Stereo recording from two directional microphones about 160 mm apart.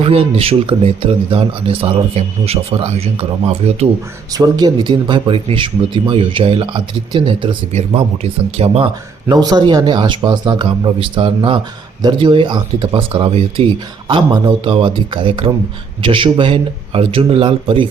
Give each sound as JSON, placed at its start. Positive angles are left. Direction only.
{"t": 0.0, "sound": "speech", "side_deg": -40}
{"t": 4.4, "sound": "speech", "side_deg": -25}
{"t": 9.3, "sound": "speech", "side_deg": -25}